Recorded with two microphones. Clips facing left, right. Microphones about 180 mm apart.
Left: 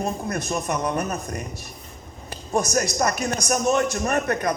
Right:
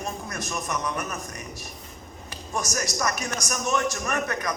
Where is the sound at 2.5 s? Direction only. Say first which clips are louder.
Left 7 dB; 35° left (ahead or behind).